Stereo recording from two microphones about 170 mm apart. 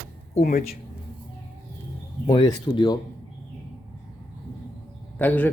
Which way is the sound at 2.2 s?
25° left (ahead or behind).